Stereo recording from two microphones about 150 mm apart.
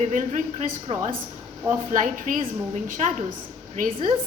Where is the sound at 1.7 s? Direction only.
60° right (ahead or behind).